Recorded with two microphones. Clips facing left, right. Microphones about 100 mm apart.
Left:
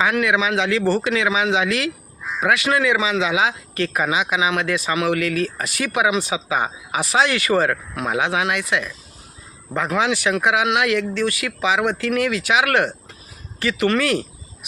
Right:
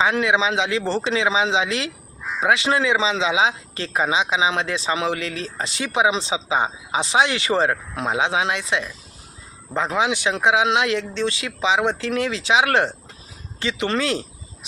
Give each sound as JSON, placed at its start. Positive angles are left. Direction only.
{"t": 0.0, "sound": "speech", "side_deg": -25}